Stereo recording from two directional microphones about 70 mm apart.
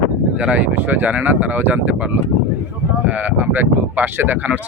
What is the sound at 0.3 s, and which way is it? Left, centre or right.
Speech, right.